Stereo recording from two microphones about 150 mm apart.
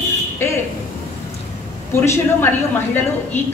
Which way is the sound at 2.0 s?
20° left (ahead or behind).